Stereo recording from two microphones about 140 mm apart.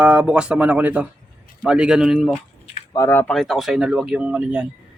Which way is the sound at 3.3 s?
Centre (ahead or behind).